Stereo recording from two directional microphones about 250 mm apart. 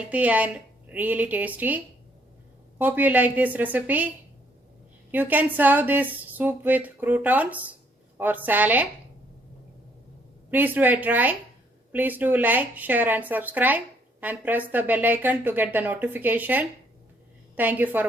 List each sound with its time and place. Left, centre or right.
0.1 s speech: centre
5.1 s speech: centre
10.5 s speech: centre